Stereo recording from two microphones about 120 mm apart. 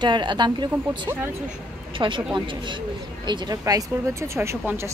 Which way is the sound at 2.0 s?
45° right (ahead or behind).